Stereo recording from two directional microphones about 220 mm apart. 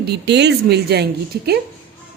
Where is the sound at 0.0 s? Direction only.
50° right (ahead or behind).